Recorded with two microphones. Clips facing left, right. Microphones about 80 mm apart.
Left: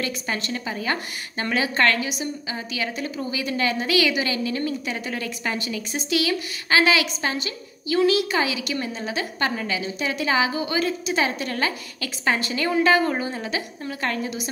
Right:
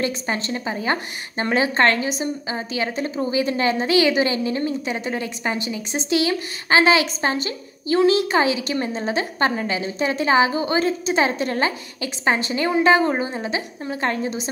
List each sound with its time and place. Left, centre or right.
0.0 s a woman's voice: right